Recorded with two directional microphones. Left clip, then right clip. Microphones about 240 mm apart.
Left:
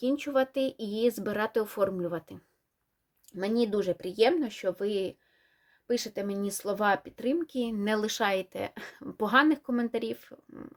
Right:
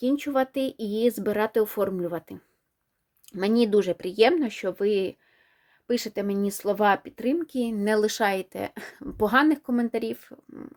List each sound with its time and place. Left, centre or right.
0.0 s speech: right